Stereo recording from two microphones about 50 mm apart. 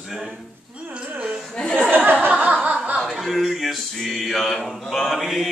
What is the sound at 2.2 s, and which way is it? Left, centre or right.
Chuckle, right.